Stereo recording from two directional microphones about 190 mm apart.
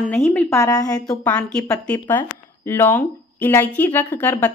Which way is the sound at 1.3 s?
5° left (ahead or behind).